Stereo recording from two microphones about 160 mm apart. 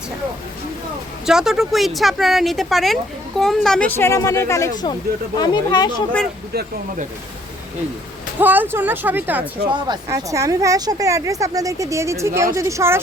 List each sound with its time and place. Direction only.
1.3 s speech: 5° right (ahead or behind); by 5.9 s 25° left (ahead or behind)
8.4 s speech: 10° right (ahead or behind)
9.6 s speech: 30° right (ahead or behind)
10.1 s speech: 20° right (ahead or behind)